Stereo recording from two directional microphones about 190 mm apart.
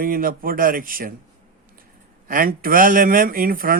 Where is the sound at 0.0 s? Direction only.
50° right (ahead or behind).